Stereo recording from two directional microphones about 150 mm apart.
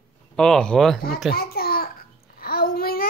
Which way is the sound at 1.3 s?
90° left.